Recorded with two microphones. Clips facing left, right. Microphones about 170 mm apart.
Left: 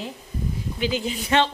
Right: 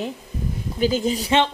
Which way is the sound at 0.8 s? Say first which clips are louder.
Right 6 dB; 40° right (ahead or behind).